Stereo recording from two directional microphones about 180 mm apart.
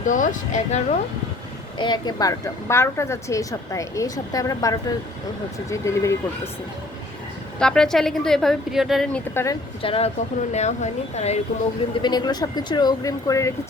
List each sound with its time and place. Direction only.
0.0 s speech: 45° left (ahead or behind)
1.8 s a woman's voice: 25° left (ahead or behind)
7.6 s speech: 5° left (ahead or behind)
9.3 s speech: 15° left (ahead or behind)
9.8 s speech: 30° left (ahead or behind)
12.0 s a woman's voice: 25° left (ahead or behind)